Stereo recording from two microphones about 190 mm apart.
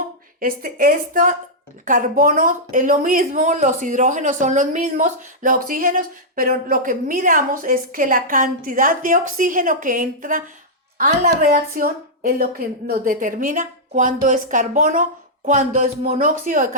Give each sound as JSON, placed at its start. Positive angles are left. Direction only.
{"t": 0.3, "sound": "a woman's voice", "side_deg": -50}